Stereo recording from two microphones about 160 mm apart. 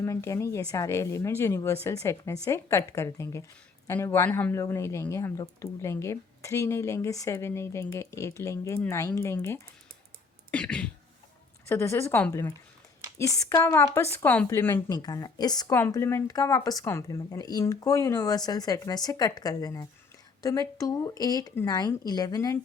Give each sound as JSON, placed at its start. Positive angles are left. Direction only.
{"t": 0.0, "sound": "speech", "side_deg": 20}
{"t": 15.0, "sound": "speech", "side_deg": 25}
{"t": 15.7, "sound": "speech", "side_deg": 15}